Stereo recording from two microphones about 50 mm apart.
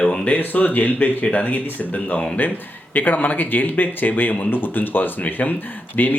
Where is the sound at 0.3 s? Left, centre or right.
Left.